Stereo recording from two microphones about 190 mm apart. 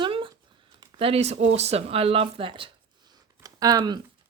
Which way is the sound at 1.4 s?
35° right (ahead or behind).